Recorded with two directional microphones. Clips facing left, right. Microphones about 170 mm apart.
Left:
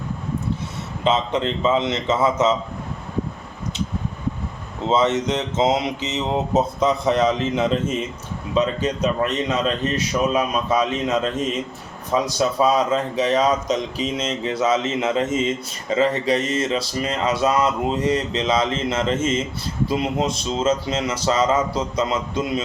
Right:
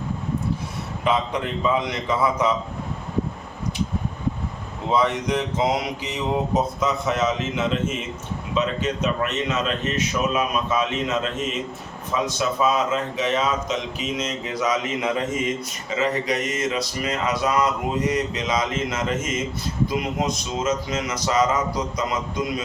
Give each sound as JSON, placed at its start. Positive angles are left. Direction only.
{"t": 1.0, "sound": "speech", "side_deg": 25}
{"t": 4.9, "sound": "a man's voice", "side_deg": 25}
{"t": 12.1, "sound": "speech", "side_deg": 35}